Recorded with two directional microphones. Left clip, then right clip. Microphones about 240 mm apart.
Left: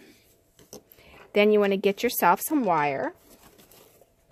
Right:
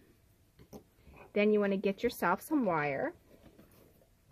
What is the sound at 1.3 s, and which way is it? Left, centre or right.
Speech, left.